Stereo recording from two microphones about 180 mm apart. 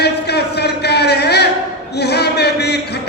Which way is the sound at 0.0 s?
65° left (ahead or behind).